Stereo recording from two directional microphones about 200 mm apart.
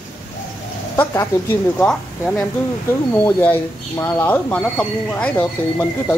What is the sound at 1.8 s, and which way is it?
Speech, 5° left (ahead or behind).